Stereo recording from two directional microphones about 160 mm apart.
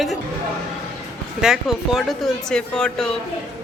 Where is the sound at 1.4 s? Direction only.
5° right (ahead or behind).